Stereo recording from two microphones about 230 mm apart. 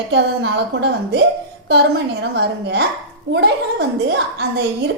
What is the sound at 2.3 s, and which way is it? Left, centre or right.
A woman's voice, right.